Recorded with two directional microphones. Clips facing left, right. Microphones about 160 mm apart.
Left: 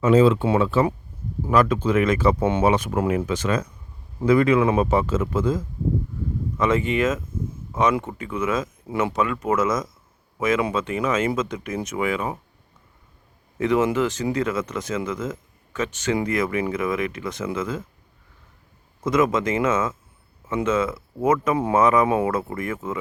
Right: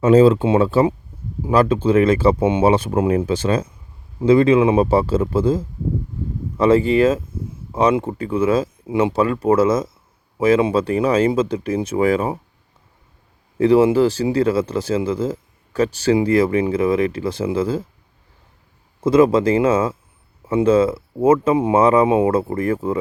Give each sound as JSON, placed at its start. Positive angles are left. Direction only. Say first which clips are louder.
{"t": 0.0, "sound": "speech", "louder": "right 4 dB", "side_deg": -40}
{"t": 2.4, "sound": "speech", "louder": "right 4 dB", "side_deg": -15}
{"t": 2.6, "sound": "speech", "louder": "right 5 dB", "side_deg": -30}
{"t": 13.6, "sound": "speech", "louder": "right 7 dB", "side_deg": -30}
{"t": 19.0, "sound": "speech", "louder": "right 7 dB", "side_deg": -30}